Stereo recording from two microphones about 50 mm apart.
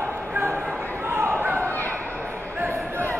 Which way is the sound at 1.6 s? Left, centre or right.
Left.